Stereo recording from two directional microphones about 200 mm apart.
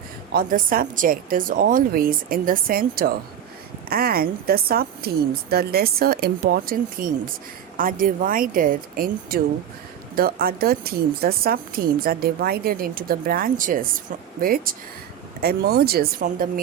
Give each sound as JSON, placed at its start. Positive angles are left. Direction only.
{"t": 0.3, "sound": "a woman's voice", "side_deg": -45}